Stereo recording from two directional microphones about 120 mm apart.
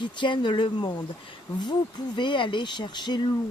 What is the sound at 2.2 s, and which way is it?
Speech, 40° left (ahead or behind).